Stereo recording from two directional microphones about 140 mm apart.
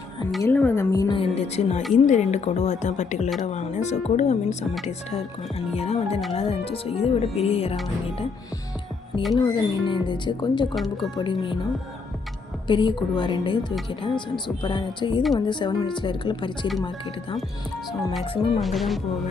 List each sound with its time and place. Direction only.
0.5 s music: 15° left (ahead or behind)
1.1 s music: 45° left (ahead or behind)
2.0 s a woman's voice: 55° left (ahead or behind)
9.3 s speech: 35° left (ahead or behind)
10.8 s speech: centre (ahead or behind)
11.1 s speech: 35° left (ahead or behind)
12.6 s speech: 35° left (ahead or behind)
18.2 s speech: 40° left (ahead or behind)
18.6 s speech: centre (ahead or behind)